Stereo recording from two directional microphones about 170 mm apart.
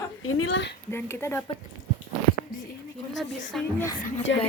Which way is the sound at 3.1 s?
Centre (ahead or behind).